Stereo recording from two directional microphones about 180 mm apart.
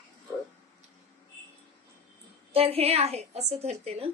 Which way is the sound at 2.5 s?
35° right (ahead or behind).